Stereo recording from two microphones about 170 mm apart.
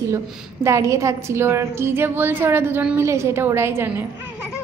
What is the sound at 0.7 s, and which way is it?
A woman's voice, 15° right (ahead or behind).